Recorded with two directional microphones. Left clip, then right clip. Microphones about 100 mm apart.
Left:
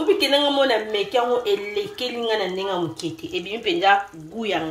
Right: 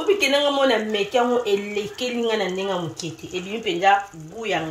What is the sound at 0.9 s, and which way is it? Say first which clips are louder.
Speech: right 1 dB; 15° left (ahead or behind).